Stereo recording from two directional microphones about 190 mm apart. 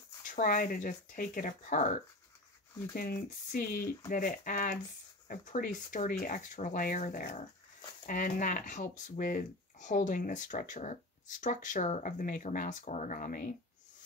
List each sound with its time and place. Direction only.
0.4 s speech: 45° left (ahead or behind)